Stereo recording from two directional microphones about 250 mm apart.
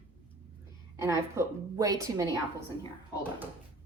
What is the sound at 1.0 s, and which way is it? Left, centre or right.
A woman's voice, centre.